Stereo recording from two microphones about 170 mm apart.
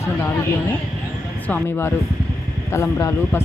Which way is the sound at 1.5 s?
10° left (ahead or behind).